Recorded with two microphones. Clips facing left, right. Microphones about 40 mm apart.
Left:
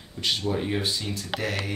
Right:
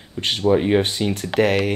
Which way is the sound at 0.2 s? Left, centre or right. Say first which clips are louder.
Right 9 dB; right.